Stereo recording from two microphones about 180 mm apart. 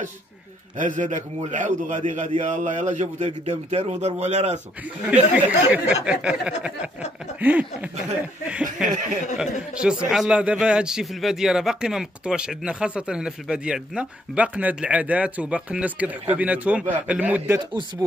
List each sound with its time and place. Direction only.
0.7 s a man's voice: 45° right (ahead or behind)
5.1 s a man's voice: 10° right (ahead or behind)